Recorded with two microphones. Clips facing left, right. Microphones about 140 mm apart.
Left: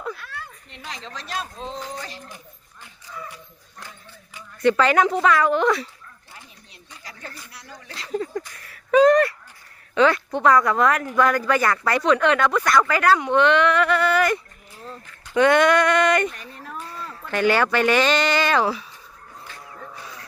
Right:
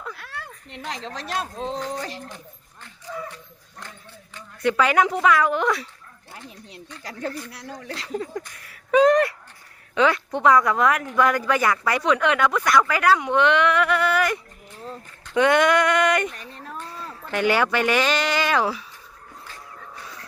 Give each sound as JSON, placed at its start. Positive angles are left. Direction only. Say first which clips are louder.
{"t": 0.2, "sound": "a sound", "louder": "even", "side_deg": -80}
{"t": 0.9, "sound": "speech", "louder": "right 3 dB", "side_deg": -65}
{"t": 3.3, "sound": "speech", "louder": "even", "side_deg": 5}
{"t": 4.6, "sound": "speech", "louder": "left 2 dB", "side_deg": -5}
{"t": 8.0, "sound": "speech", "louder": "left 3 dB", "side_deg": -10}
{"t": 8.7, "sound": "a sound", "louder": "left 2 dB", "side_deg": -15}
{"t": 9.9, "sound": "speech", "louder": "left 2 dB", "side_deg": -10}
{"t": 15.4, "sound": "speech", "louder": "left 2 dB", "side_deg": -15}
{"t": 16.3, "sound": "dog", "louder": "even", "side_deg": 5}
{"t": 17.3, "sound": "speech", "louder": "left 1 dB", "side_deg": -10}